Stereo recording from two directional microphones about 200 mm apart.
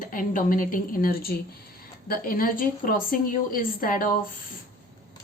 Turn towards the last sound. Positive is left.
turn(degrees=45)  # may be behind; listen again after turning